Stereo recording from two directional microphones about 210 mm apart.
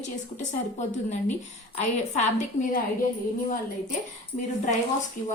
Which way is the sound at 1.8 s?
35° left (ahead or behind).